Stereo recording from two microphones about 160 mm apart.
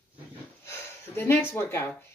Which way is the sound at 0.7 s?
15° left (ahead or behind).